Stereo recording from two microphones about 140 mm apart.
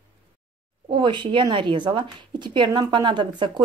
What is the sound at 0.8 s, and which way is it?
Speech, 35° right (ahead or behind).